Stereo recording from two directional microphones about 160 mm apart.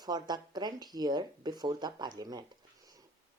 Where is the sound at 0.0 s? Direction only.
25° right (ahead or behind).